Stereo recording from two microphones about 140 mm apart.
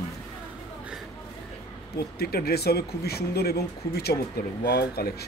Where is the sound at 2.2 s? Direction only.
90° left.